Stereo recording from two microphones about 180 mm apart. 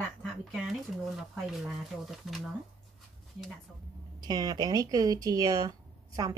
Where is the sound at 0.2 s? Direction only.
Centre (ahead or behind).